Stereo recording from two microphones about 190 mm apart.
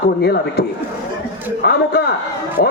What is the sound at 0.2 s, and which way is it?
Speech, 60° left (ahead or behind).